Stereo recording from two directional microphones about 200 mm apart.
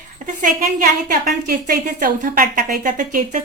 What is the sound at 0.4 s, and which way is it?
A woman's voice, 45° right (ahead or behind).